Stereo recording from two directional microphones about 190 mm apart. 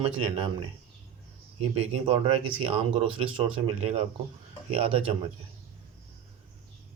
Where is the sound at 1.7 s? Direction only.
30° right (ahead or behind).